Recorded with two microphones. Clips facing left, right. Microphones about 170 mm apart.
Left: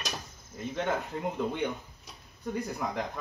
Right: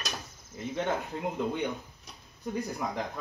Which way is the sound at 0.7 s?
5° right (ahead or behind).